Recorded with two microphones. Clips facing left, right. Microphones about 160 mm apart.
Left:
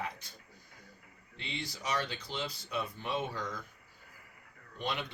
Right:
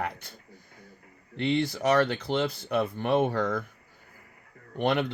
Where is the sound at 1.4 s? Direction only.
60° right (ahead or behind).